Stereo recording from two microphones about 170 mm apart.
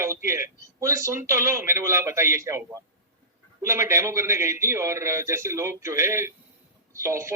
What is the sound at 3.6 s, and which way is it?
Speech, 15° right (ahead or behind).